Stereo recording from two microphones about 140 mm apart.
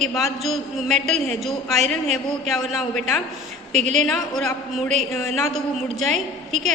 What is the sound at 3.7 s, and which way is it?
Speech, 55° right (ahead or behind).